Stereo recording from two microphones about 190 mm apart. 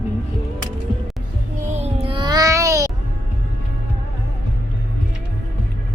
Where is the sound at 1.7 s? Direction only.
30° right (ahead or behind); by 2.9 s 15° right (ahead or behind).